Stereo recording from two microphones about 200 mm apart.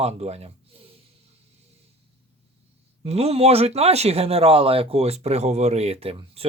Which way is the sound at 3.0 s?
30° right (ahead or behind).